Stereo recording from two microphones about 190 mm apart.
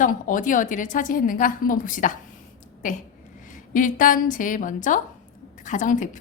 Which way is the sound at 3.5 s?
45° left (ahead or behind).